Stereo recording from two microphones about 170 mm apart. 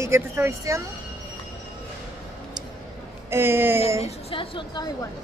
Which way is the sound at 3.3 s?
15° right (ahead or behind).